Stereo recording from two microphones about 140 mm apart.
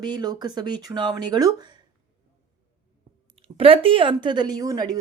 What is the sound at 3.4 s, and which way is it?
Speech, 40° right (ahead or behind).